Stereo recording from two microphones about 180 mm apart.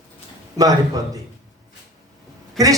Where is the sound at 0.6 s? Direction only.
20° right (ahead or behind).